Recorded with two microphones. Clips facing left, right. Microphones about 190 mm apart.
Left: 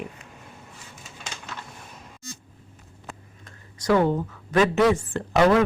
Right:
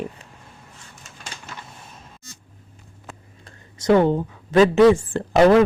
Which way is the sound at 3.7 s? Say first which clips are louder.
Right 4 dB; 25° right (ahead or behind).